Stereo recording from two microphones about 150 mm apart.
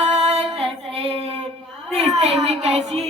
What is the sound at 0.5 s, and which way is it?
Child singing, 40° right (ahead or behind).